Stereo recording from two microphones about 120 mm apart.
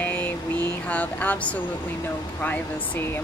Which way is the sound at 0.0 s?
10° left (ahead or behind).